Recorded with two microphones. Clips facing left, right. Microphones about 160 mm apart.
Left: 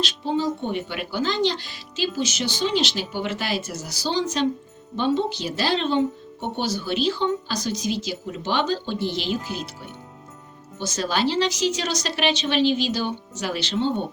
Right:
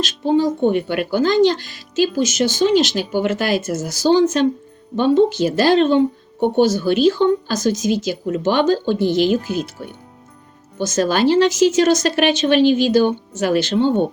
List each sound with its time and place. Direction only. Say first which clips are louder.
0.0 s speech: right 7 dB; 50° right (ahead or behind)
10.8 s speech: right 8 dB; 50° right (ahead or behind)